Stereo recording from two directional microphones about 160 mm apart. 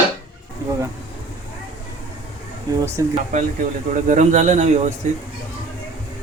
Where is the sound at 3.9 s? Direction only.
50° right (ahead or behind).